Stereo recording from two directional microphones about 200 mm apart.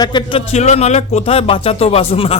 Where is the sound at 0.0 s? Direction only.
20° left (ahead or behind).